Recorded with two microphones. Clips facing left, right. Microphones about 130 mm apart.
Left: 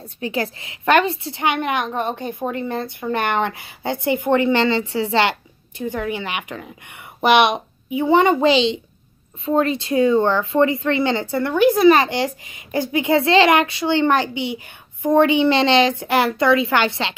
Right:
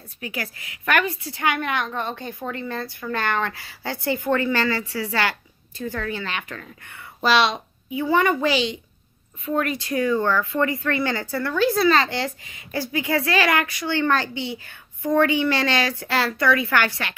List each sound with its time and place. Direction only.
0.2 s speech: 25° left (ahead or behind)